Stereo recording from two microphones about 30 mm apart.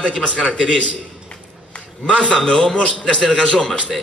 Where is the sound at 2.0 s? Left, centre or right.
Left.